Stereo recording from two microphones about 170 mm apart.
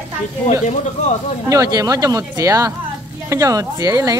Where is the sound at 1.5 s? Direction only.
20° right (ahead or behind).